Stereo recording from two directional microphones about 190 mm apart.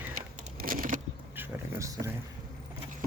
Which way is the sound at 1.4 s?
15° right (ahead or behind).